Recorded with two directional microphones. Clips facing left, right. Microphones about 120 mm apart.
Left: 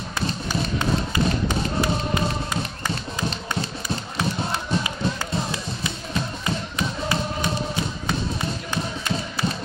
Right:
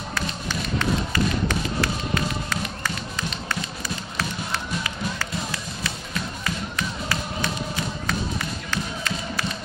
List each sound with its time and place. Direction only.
0.7 s music: 20° left (ahead or behind)
4.2 s music: 20° left (ahead or behind)
8.1 s a sound: 20° left (ahead or behind)